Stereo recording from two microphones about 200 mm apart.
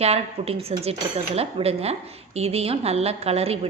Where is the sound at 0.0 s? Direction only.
30° right (ahead or behind).